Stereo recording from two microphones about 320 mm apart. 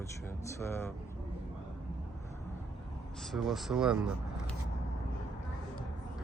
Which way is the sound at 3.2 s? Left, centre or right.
Centre.